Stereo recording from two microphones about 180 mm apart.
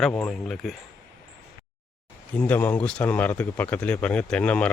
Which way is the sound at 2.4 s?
10° left (ahead or behind).